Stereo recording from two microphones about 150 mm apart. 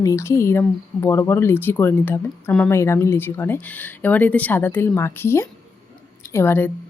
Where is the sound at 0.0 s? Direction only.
20° left (ahead or behind).